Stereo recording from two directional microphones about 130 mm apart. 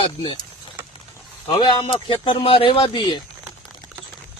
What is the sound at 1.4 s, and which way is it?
Speech, 35° left (ahead or behind).